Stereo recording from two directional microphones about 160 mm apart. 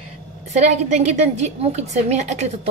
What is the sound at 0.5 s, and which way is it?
A woman's voice, 45° right (ahead or behind).